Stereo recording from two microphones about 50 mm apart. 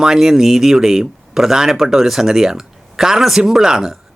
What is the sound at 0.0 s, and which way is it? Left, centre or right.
Speech, centre.